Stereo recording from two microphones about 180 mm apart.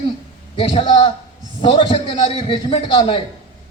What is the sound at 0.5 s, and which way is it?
A man's voice, 30° left (ahead or behind).